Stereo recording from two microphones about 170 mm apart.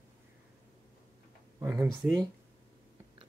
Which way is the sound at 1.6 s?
10° right (ahead or behind).